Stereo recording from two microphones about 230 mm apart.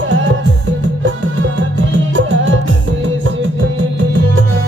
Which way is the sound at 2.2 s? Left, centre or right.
Right.